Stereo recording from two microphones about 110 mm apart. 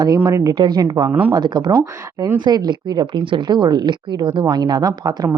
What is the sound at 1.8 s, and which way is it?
Speech, 30° right (ahead or behind).